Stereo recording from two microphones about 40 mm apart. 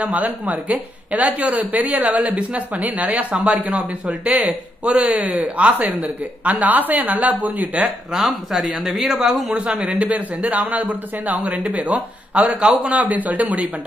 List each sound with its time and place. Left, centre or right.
0.0 s a woman's voice: right
4.4 s a woman's voice: right
8.1 s speech: centre
9.8 s a woman's voice: right
12.4 s a man's voice: right
12.9 s a woman's voice: right